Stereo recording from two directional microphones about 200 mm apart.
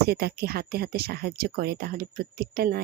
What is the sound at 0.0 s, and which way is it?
Speech, 55° right (ahead or behind).